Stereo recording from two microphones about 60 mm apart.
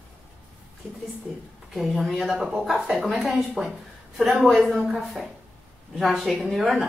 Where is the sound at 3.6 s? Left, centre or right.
Centre.